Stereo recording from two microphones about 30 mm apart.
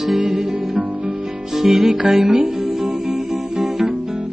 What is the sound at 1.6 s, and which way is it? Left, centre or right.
Music, centre.